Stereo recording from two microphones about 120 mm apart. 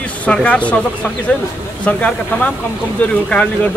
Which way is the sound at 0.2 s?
10° left (ahead or behind).